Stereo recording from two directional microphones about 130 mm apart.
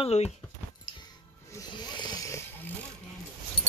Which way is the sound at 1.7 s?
35° left (ahead or behind).